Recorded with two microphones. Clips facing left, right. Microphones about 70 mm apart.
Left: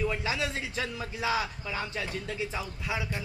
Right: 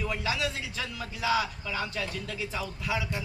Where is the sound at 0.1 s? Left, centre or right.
Left.